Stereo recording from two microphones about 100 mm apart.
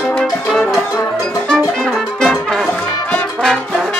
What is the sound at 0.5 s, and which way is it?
Music, 10° left (ahead or behind).